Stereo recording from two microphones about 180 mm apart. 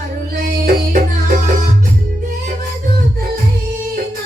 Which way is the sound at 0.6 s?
45° right (ahead or behind).